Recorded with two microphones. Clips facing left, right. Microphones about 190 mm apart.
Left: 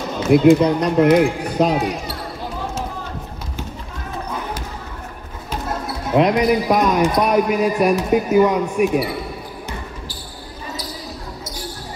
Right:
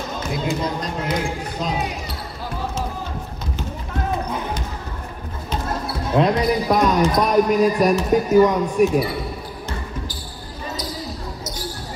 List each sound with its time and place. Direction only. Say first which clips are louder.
0.3 s speech: left 14 dB; 65° left (ahead or behind)
6.1 s speech: left 3 dB; 15° left (ahead or behind)